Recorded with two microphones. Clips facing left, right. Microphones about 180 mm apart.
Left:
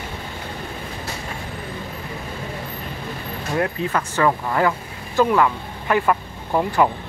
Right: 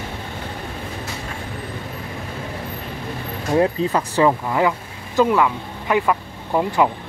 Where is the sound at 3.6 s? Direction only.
25° right (ahead or behind).